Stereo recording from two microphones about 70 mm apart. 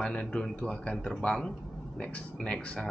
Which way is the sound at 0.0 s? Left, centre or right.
Centre.